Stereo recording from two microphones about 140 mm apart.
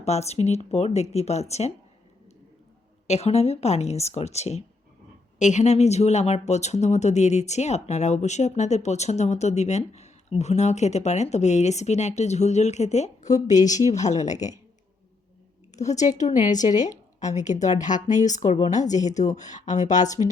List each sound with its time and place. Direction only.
0.0 s speech: 50° left (ahead or behind)
3.1 s speech: 50° left (ahead or behind)
15.7 s speech: 55° left (ahead or behind)